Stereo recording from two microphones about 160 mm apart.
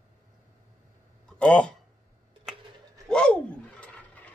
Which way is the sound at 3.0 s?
5° left (ahead or behind).